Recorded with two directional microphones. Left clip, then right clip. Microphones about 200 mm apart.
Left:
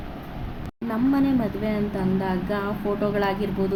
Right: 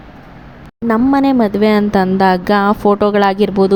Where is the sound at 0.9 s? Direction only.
45° right (ahead or behind).